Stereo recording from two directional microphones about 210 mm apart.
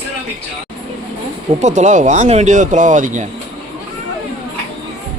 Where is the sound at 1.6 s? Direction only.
35° right (ahead or behind).